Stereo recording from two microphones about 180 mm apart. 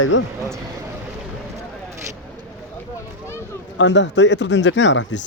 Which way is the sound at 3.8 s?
80° left.